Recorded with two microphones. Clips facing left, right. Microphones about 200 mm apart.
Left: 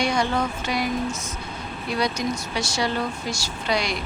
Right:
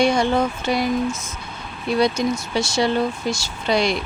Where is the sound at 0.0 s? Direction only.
25° right (ahead or behind).